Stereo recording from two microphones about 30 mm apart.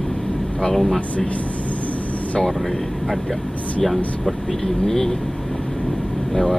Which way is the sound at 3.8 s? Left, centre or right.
Centre.